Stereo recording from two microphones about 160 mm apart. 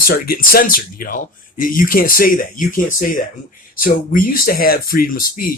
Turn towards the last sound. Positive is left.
turn(degrees=60)  # may be behind; listen again after turning